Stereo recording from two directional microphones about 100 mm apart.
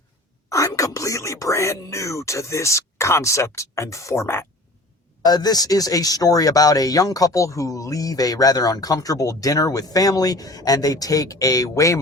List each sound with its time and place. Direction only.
0.5 s speech: 35° left (ahead or behind)
5.2 s speech: 40° left (ahead or behind)